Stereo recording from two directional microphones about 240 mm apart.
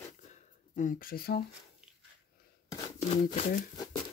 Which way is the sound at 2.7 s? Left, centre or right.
Left.